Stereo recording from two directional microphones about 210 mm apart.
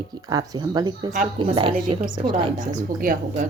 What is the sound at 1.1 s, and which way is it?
Speech, 30° right (ahead or behind).